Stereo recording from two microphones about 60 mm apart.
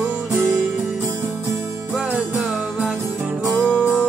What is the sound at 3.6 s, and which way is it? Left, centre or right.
Music, right.